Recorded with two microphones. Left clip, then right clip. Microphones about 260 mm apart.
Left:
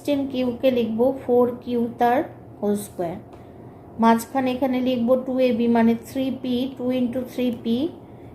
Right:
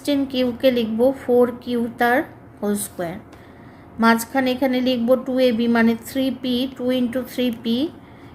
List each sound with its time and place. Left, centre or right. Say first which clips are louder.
0.0 s a woman's voice: right 2 dB; right